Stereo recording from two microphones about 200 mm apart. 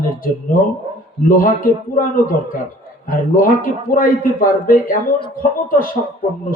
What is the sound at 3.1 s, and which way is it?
A man's voice, 45° left (ahead or behind).